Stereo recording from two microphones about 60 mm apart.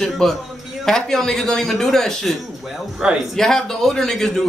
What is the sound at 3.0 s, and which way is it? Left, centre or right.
Speech, centre.